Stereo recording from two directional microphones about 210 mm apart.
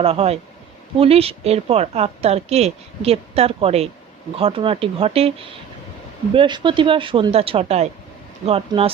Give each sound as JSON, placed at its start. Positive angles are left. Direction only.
{"t": 0.0, "sound": "a woman's voice", "side_deg": -30}